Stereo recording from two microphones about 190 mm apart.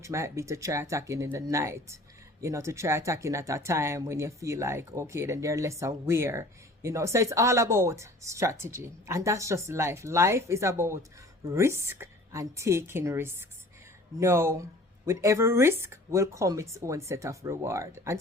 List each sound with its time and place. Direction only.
0.0 s speech: 15° right (ahead or behind)